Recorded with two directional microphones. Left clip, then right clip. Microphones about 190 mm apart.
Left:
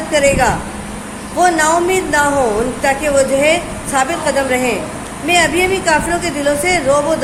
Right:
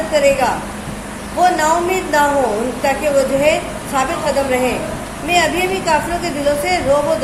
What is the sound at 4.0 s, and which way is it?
Speech, 40° left (ahead or behind).